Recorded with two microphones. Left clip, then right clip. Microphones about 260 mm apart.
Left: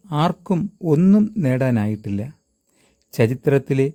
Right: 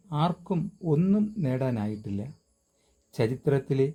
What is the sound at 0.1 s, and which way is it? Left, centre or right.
Speech, left.